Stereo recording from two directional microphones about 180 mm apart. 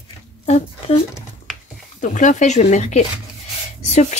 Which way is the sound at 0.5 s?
40° left (ahead or behind).